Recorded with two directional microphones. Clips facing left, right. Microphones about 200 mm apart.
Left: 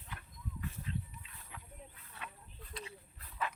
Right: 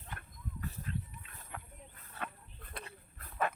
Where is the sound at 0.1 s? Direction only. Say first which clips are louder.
Right 1 dB; 45° right (ahead or behind).